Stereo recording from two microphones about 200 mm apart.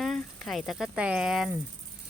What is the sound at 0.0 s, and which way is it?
Speech, 5° left (ahead or behind).